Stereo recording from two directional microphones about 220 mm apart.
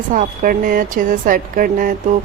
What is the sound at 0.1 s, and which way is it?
Speech, 35° right (ahead or behind).